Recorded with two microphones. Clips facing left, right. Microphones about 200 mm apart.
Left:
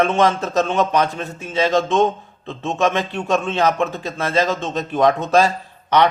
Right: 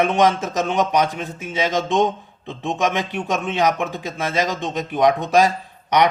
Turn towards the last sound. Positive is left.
turn(degrees=-15)  # may be behind; listen again after turning